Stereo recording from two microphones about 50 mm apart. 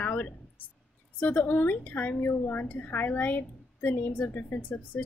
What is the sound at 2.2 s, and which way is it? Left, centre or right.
A woman's voice, left.